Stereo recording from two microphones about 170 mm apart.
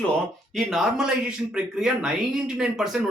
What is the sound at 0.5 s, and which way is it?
Speech, centre (ahead or behind).